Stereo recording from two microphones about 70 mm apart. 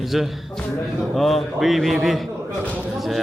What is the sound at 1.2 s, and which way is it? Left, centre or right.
A man's voice, centre.